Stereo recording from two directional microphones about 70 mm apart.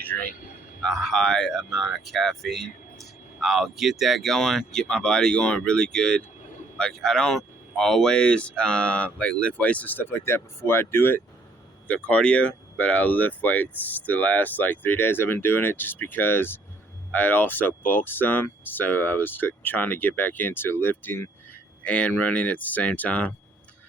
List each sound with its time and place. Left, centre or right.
0.0 s a sound: left
0.8 s speech: centre; by 11.2 s left
11.9 s speech: centre
21.8 s speech: centre